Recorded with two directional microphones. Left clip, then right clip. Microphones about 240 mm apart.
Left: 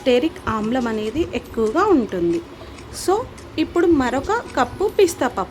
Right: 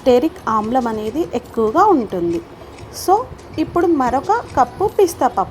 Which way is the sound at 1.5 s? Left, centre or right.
Centre.